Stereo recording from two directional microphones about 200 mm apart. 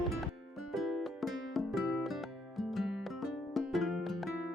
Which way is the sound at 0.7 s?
Centre (ahead or behind).